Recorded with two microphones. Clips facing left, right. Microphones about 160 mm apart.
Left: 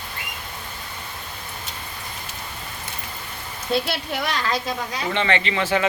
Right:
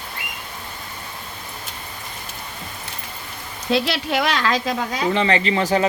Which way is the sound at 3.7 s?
90° right.